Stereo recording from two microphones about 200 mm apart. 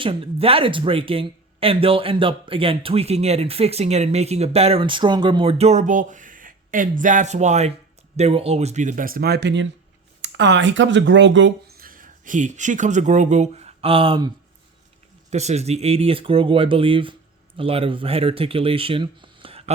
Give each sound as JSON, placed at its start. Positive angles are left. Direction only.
{"t": 0.0, "sound": "speech", "side_deg": -25}
{"t": 11.8, "sound": "speech", "side_deg": -45}
{"t": 15.3, "sound": "speech", "side_deg": -35}